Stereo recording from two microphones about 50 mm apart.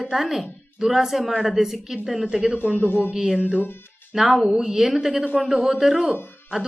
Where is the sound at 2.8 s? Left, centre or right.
Left.